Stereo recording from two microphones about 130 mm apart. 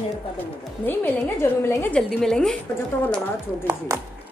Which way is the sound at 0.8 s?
15° left (ahead or behind).